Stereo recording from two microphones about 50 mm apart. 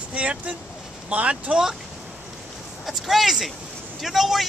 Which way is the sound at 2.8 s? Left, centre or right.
Centre.